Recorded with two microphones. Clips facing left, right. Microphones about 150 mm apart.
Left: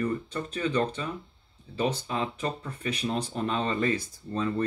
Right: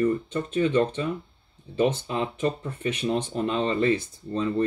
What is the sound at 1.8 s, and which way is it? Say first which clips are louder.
Speech: right 2 dB; 30° right (ahead or behind).